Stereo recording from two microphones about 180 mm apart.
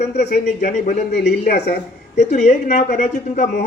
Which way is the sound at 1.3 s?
65° left (ahead or behind).